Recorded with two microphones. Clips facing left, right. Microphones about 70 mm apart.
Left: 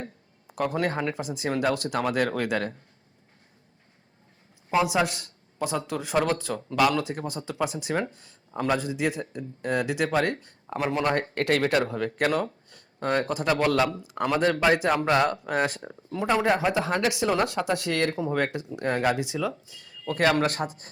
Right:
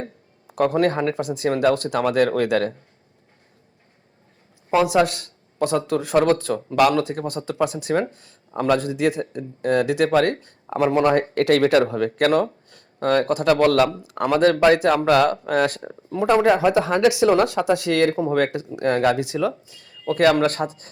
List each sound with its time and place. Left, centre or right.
0.0 s speech: right
4.8 s speech: right
11.2 s speech: right
16.2 s speech: right
16.6 s speech: right
18.1 s speech: right